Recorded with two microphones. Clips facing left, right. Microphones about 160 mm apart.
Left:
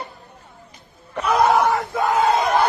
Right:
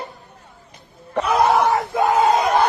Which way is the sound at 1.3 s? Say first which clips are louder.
Even; centre (ahead or behind).